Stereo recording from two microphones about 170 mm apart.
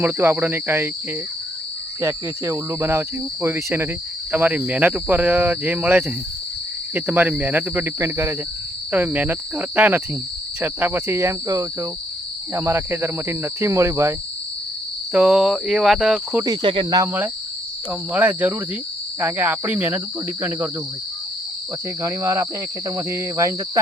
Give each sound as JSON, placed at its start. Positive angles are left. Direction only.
{"t": 0.0, "sound": "speech", "side_deg": -15}
{"t": 2.0, "sound": "speech", "side_deg": -15}
{"t": 15.1, "sound": "cricket", "side_deg": -5}
{"t": 16.4, "sound": "speech", "side_deg": -25}
{"t": 17.0, "sound": "speech", "side_deg": -10}
{"t": 22.0, "sound": "speech", "side_deg": -15}